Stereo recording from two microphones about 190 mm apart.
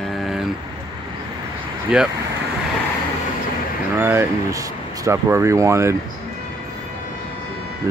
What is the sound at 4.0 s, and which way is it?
Speech, 10° right (ahead or behind).